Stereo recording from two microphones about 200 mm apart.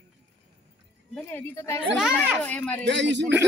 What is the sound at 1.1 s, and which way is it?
Speech, 10° left (ahead or behind).